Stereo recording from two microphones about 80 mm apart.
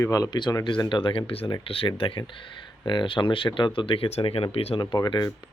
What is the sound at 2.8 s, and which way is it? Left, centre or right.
Speech, left.